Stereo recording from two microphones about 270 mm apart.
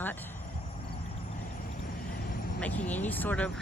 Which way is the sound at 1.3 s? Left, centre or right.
Left.